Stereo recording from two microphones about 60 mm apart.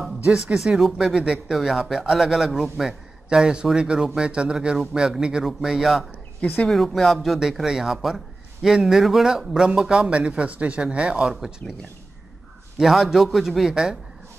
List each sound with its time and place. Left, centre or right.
0.2 s speech: centre
0.7 s a man's voice: centre
6.4 s speech: left
7.0 s a man's voice: centre
11.6 s speech: centre
12.7 s a man's voice: centre